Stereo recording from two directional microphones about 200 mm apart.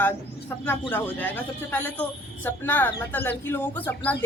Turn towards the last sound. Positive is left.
turn(degrees=10)  # may be behind; listen again after turning